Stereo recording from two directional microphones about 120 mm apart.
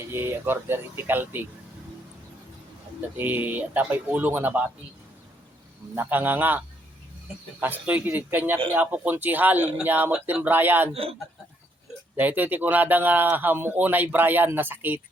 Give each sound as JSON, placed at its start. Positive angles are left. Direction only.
{"t": 0.1, "sound": "speech", "side_deg": -20}
{"t": 3.2, "sound": "speech", "side_deg": -15}
{"t": 6.0, "sound": "speech", "side_deg": -15}
{"t": 12.1, "sound": "speech", "side_deg": -15}